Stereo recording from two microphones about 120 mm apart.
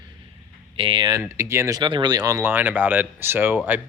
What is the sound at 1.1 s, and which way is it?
Speech, 25° right (ahead or behind).